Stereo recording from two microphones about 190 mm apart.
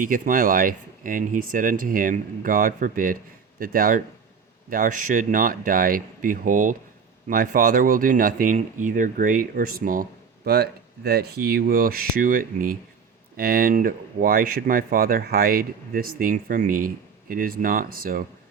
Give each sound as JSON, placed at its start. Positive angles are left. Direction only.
{"t": 0.0, "sound": "speech", "side_deg": -45}